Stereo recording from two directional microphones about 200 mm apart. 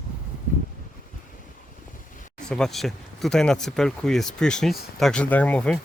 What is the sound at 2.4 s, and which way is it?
Speech, 5° left (ahead or behind).